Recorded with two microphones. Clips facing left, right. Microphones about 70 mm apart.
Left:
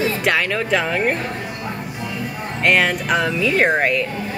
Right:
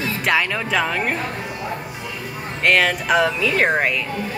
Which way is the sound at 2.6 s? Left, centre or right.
Centre.